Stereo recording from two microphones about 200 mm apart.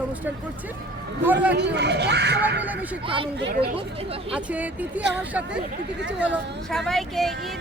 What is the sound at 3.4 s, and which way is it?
Speech, 55° right (ahead or behind).